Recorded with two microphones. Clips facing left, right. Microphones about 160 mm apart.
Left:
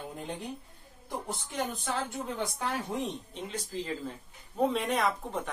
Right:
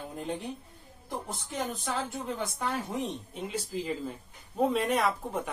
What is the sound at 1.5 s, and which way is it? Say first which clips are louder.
Speech: right 1 dB; centre (ahead or behind).